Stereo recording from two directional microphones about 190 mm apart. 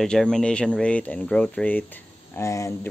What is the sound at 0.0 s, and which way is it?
Speech, 5° left (ahead or behind).